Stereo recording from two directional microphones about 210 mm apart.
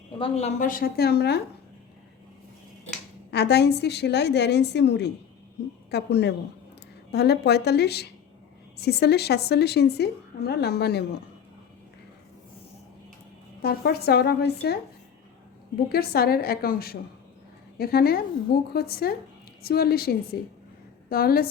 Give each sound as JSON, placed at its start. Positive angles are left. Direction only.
{"t": 0.2, "sound": "a woman's voice", "side_deg": 30}
{"t": 3.3, "sound": "a woman's voice", "side_deg": 50}
{"t": 13.6, "sound": "a woman's voice", "side_deg": 50}
{"t": 15.9, "sound": "a woman's voice", "side_deg": 50}